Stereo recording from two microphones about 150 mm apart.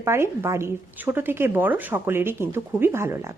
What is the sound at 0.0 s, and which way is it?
A woman's voice, 15° right (ahead or behind).